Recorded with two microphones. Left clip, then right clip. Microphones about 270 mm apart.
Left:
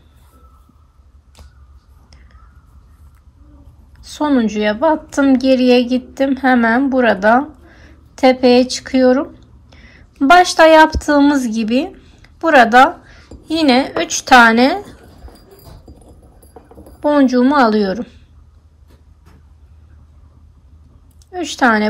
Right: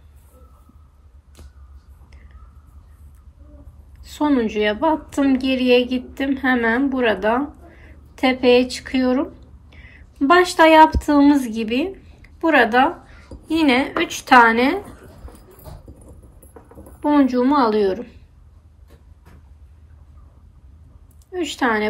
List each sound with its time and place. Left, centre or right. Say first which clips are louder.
4.0 s a woman's voice: left 3 dB; left
17.0 s a woman's voice: left 4 dB; left
21.4 s a woman's voice: left 6 dB; left